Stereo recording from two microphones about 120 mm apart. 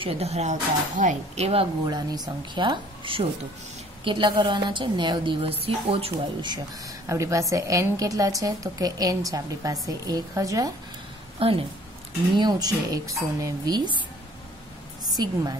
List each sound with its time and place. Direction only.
0.0 s speech: 55° right (ahead or behind)
1.9 s a woman's voice: 35° right (ahead or behind); by 6.1 s 55° right (ahead or behind)
7.1 s a woman's voice: 25° right (ahead or behind)
11.3 s speech: 50° right (ahead or behind)
12.4 s speech: 35° right (ahead or behind)